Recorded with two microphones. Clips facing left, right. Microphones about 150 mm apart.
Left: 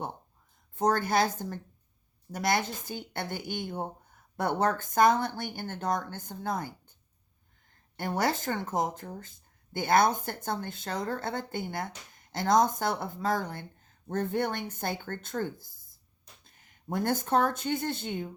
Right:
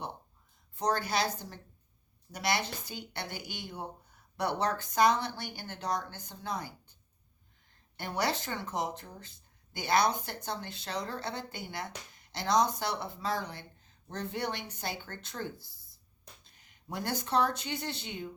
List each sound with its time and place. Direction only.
0.8 s speech: 50° left (ahead or behind)
7.9 s speech: 50° left (ahead or behind)